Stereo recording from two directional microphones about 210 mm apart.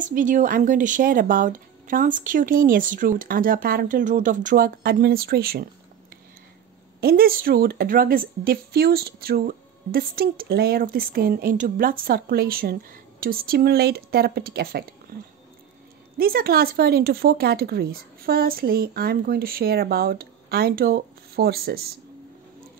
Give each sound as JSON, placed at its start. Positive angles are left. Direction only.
{"t": 0.0, "sound": "speech", "side_deg": -40}
{"t": 7.0, "sound": "a woman's voice", "side_deg": -45}
{"t": 16.2, "sound": "a woman's voice", "side_deg": -45}